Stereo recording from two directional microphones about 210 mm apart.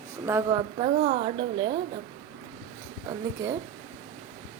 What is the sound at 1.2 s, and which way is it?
Speech, 25° right (ahead or behind).